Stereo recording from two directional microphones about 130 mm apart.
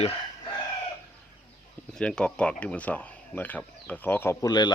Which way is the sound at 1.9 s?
5° left (ahead or behind).